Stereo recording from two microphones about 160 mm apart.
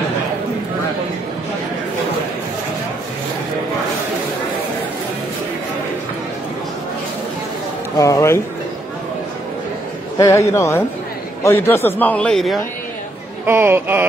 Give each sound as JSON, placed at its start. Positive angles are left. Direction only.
{"t": 8.0, "sound": "speech", "side_deg": 20}
{"t": 10.1, "sound": "a man's voice", "side_deg": 15}
{"t": 13.5, "sound": "speech", "side_deg": -15}